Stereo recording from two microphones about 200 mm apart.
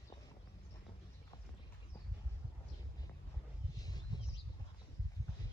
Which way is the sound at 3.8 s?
20° left (ahead or behind).